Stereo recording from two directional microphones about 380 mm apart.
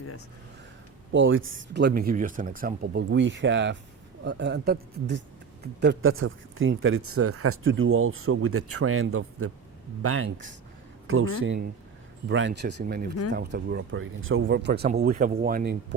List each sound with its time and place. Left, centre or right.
1.1 s speech: right